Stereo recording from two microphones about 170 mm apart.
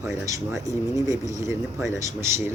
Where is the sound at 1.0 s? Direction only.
20° right (ahead or behind).